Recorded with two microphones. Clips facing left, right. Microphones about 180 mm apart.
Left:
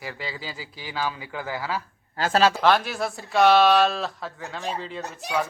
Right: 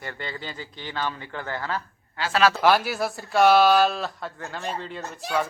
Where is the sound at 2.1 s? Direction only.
40° left (ahead or behind).